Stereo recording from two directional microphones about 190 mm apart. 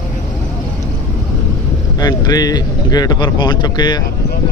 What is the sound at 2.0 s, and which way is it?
Speech, 20° left (ahead or behind).